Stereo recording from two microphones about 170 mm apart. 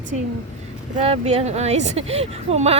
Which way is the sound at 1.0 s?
35° right (ahead or behind).